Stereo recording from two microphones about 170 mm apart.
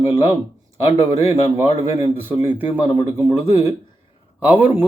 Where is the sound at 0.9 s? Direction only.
15° right (ahead or behind).